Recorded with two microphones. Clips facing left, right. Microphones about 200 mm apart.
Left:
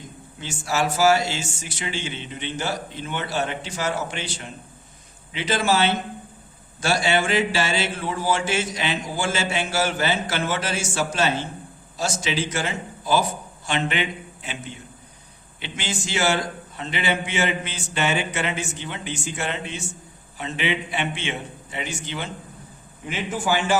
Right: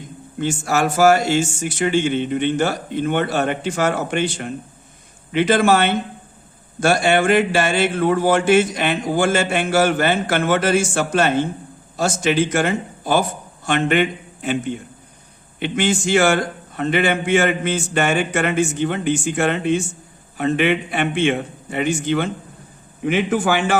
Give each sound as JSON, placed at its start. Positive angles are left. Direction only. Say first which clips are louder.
{"t": 0.3, "sound": "a man's voice", "louder": "right 6 dB", "side_deg": -50}
{"t": 23.0, "sound": "speech", "louder": "right 7 dB", "side_deg": -65}